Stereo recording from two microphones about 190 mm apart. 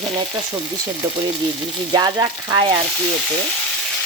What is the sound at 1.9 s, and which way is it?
Frying, 20° right (ahead or behind).